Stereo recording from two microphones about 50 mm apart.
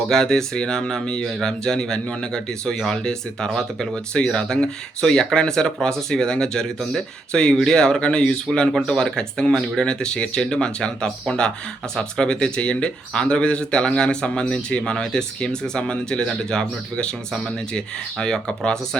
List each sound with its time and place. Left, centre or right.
0.1 s speech: centre